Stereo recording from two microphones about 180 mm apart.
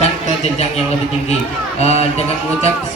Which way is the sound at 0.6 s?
35° left (ahead or behind).